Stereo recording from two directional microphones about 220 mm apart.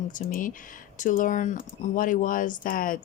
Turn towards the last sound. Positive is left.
turn(degrees=40)  # may be behind; listen again after turning